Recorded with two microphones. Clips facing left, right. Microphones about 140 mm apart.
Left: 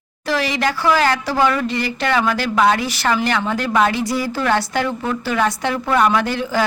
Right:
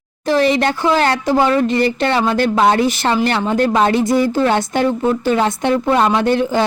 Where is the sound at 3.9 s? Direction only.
50° right (ahead or behind).